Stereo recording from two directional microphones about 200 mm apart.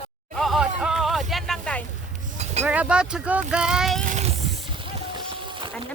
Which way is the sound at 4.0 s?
35° right (ahead or behind).